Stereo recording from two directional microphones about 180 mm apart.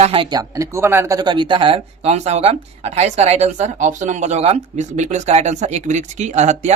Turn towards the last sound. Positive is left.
turn(degrees=-40)  # may be behind; listen again after turning